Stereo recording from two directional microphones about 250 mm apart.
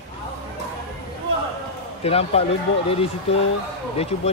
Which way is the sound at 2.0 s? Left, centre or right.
Left.